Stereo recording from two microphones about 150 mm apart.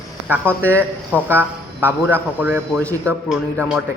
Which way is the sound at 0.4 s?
10° left (ahead or behind).